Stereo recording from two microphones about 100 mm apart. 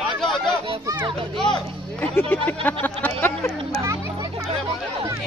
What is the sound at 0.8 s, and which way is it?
Children playing, 35° right (ahead or behind).